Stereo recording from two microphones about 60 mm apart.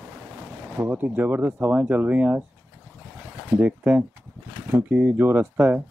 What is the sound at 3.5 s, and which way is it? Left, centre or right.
Speech, right.